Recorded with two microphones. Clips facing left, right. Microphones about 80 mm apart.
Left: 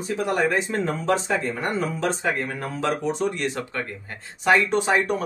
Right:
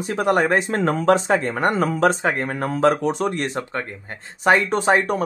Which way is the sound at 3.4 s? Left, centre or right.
Right.